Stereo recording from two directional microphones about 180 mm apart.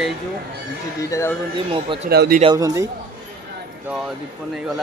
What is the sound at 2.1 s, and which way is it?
Speech, 65° right (ahead or behind).